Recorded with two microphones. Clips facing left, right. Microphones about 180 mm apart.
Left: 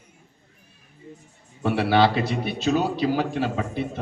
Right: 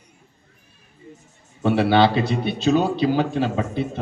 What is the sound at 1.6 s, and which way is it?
A man's voice, 25° right (ahead or behind).